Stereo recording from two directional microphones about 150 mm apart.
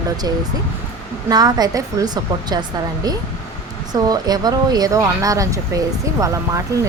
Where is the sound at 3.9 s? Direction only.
25° right (ahead or behind).